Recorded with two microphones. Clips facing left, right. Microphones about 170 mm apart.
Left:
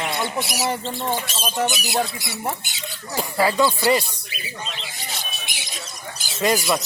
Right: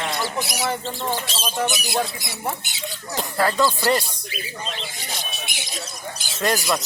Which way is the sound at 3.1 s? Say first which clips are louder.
Left 2 dB; 10° left (ahead or behind).